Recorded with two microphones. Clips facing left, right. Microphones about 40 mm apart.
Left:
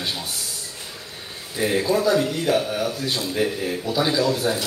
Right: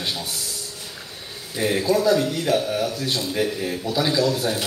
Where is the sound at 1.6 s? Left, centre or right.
Left.